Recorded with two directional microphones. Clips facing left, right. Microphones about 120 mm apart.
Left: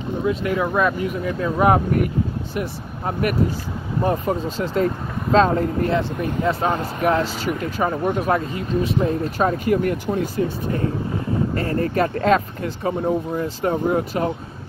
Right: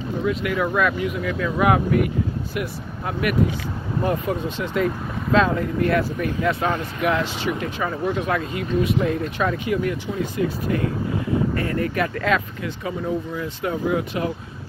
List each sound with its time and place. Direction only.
0.2 s speech: 30° left (ahead or behind)
5.9 s speech: 25° left (ahead or behind); by 10.4 s 45° left (ahead or behind)
11.5 s speech: 35° left (ahead or behind)